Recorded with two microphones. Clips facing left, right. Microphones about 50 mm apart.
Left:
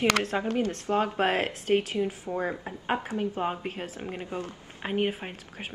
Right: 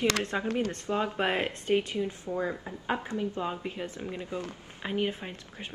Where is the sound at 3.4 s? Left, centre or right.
Left.